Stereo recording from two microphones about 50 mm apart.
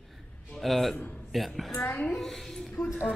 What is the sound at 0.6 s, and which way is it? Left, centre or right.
A man's voice, centre.